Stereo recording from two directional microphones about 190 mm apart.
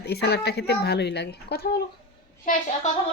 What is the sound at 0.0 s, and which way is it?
Speech, 55° left (ahead or behind).